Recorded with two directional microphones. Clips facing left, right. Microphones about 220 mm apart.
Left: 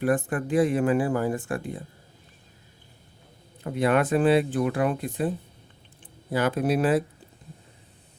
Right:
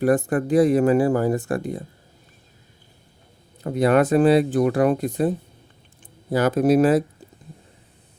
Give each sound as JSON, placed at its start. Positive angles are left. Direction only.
{"t": 0.0, "sound": "speech", "side_deg": -40}
{"t": 3.6, "sound": "speech", "side_deg": -40}
{"t": 6.3, "sound": "speech", "side_deg": -40}